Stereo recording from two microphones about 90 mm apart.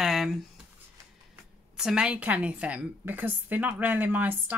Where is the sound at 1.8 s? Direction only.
10° right (ahead or behind).